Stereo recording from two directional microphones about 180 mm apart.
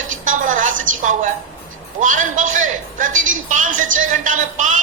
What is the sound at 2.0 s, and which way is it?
A woman's voice, 45° right (ahead or behind).